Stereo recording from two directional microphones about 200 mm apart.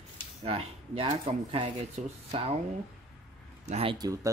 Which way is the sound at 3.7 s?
25° right (ahead or behind).